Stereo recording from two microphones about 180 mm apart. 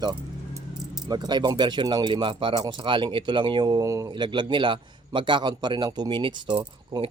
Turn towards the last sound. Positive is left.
turn(degrees=-25)  # may be behind; listen again after turning